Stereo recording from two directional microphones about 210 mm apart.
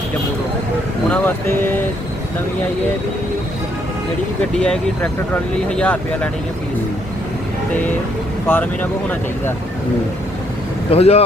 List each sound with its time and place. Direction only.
1.1 s speech: 10° left (ahead or behind)
4.5 s speech: 5° left (ahead or behind)
8.4 s speech: 10° left (ahead or behind)
10.9 s speech: 30° left (ahead or behind)